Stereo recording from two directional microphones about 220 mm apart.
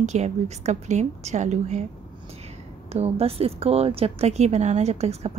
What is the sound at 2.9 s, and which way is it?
Speech, 25° right (ahead or behind).